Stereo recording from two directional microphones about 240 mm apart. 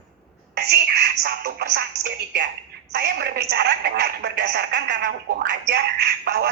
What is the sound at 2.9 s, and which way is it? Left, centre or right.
Speech, right.